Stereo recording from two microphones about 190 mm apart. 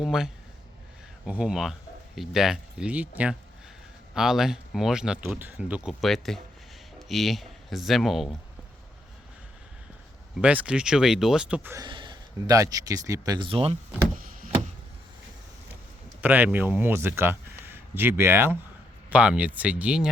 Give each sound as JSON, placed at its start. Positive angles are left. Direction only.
{"t": 0.0, "sound": "speech", "side_deg": -5}
{"t": 1.3, "sound": "speech", "side_deg": -5}
{"t": 10.4, "sound": "speech", "side_deg": -5}
{"t": 11.8, "sound": "speech", "side_deg": -25}
{"t": 16.2, "sound": "speech", "side_deg": -10}